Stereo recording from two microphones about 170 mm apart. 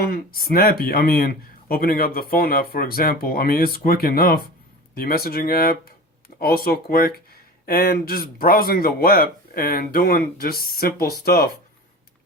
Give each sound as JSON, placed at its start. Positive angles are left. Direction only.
{"t": 0.0, "sound": "speech", "side_deg": 60}